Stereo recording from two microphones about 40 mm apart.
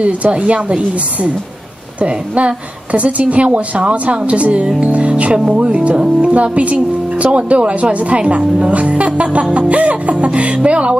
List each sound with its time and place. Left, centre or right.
0.0 s a woman's voice: right